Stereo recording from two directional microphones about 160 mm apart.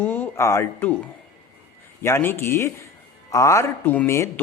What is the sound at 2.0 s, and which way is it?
Speech, 15° left (ahead or behind).